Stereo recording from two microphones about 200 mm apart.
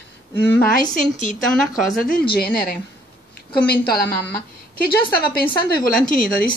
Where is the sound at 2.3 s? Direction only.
50° left (ahead or behind).